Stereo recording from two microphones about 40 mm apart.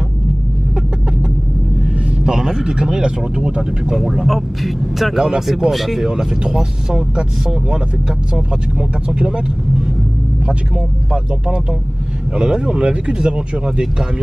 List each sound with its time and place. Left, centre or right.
2.2 s speech: centre
3.9 s speech: centre
6.0 s speech: centre
12.4 s speech: right